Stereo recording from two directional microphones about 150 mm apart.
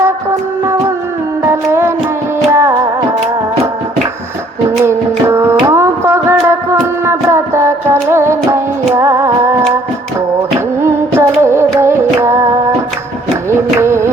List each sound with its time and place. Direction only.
1.5 s music: 15° right (ahead or behind)
4.8 s music: 15° right (ahead or behind)
7.0 s a sound: 15° right (ahead or behind)
8.1 s music: 15° right (ahead or behind)
10.8 s music: 15° right (ahead or behind)
13.7 s music: 15° right (ahead or behind)